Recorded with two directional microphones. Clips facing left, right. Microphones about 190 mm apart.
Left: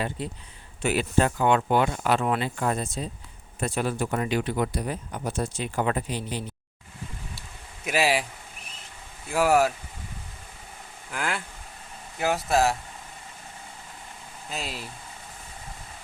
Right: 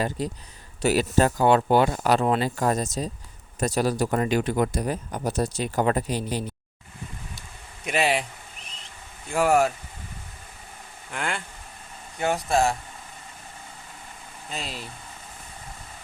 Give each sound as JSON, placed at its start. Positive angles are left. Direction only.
{"t": 0.2, "sound": "speech", "side_deg": -40}
{"t": 7.9, "sound": "speech", "side_deg": 0}
{"t": 11.1, "sound": "speech", "side_deg": 0}
{"t": 14.5, "sound": "speech", "side_deg": 0}